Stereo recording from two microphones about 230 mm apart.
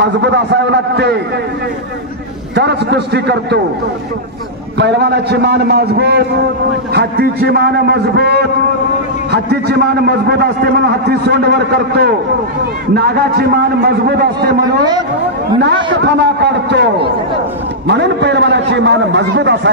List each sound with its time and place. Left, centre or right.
0.0 s a man's voice: right
2.5 s a man's voice: right
4.7 s a man's voice: right
15.6 s a man's voice: right
17.8 s a man's voice: right